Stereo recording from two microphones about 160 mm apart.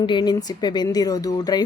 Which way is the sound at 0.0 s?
30° left (ahead or behind).